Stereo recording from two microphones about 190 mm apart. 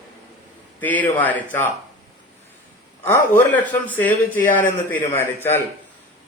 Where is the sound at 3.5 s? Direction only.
10° left (ahead or behind).